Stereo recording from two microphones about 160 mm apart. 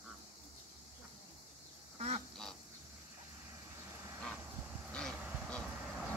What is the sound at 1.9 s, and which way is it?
Duck, 40° right (ahead or behind).